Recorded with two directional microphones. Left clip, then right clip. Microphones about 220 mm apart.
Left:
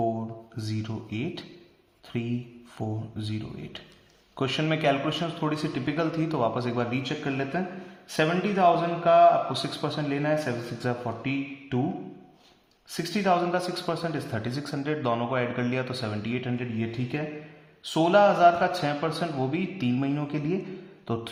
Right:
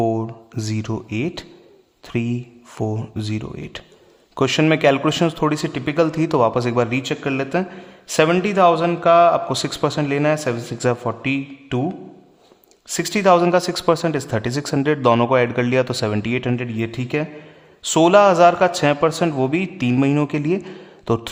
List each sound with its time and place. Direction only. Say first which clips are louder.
0.5 s a man's voice: right 10 dB; 40° right (ahead or behind)
12.9 s speech: right 10 dB; 40° right (ahead or behind)